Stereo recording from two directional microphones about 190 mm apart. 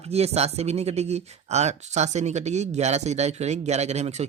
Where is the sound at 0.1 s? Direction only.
35° right (ahead or behind).